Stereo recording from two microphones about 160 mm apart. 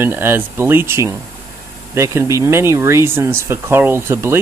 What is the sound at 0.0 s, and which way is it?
Speech, 15° right (ahead or behind).